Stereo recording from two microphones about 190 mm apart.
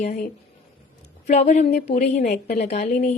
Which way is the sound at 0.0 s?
35° left (ahead or behind).